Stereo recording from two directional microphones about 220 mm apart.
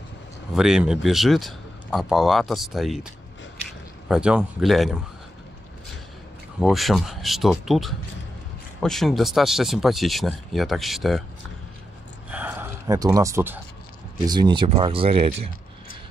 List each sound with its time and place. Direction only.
0.6 s speech: 5° right (ahead or behind)
4.1 s speech: 5° right (ahead or behind)
6.6 s speech: centre (ahead or behind)
12.3 s a sound: 10° right (ahead or behind)
14.2 s speech: 20° right (ahead or behind)